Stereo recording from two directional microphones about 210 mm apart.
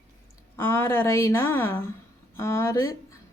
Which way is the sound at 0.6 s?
10° left (ahead or behind).